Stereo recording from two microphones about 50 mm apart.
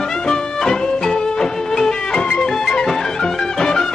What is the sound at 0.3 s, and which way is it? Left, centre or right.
Music, centre.